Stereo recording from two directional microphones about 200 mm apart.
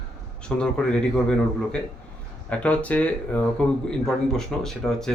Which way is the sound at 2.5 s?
5° left (ahead or behind).